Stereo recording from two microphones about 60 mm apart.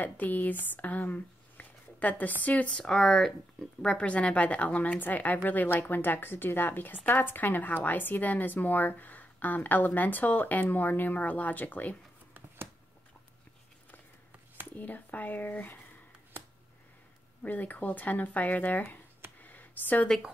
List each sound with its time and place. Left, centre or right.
0.0 s a woman's voice: left
0.7 s a sound: left
2.4 s a woman's voice: left
2.7 s speech: centre
3.8 s a woman's voice: centre
14.8 s a woman's voice: left
17.4 s a woman's voice: left
19.4 s a sound: left